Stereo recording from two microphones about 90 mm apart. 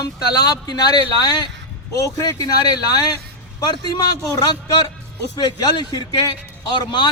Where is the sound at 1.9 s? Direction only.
40° left (ahead or behind).